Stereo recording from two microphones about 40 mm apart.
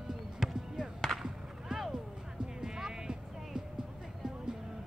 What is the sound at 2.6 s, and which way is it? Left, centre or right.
Music, centre.